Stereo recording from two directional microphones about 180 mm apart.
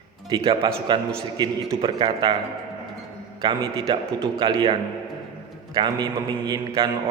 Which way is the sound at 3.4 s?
25° right (ahead or behind).